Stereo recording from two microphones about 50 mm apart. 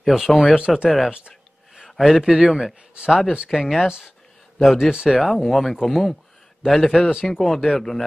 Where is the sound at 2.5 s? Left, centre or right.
Centre.